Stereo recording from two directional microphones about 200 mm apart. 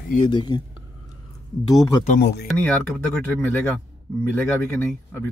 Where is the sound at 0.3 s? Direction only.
20° left (ahead or behind).